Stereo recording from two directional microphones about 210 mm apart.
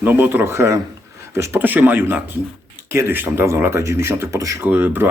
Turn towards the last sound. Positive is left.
turn(degrees=-10)  # may be behind; listen again after turning